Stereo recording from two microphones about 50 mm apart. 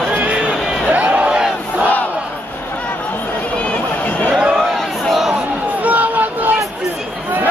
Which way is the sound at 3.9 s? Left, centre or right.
Left.